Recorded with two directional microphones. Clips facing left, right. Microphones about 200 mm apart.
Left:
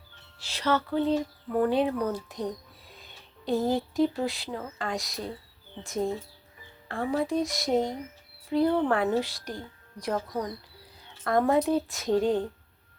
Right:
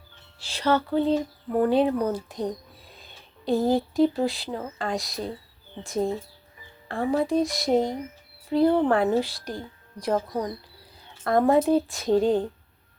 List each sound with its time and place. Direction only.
0.3 s speech: 30° right (ahead or behind)
6.8 s speech: 35° right (ahead or behind)